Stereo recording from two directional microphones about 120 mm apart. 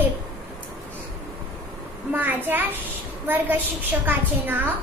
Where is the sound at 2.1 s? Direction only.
15° right (ahead or behind).